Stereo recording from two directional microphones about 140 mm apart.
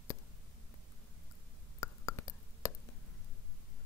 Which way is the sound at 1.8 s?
25° left (ahead or behind).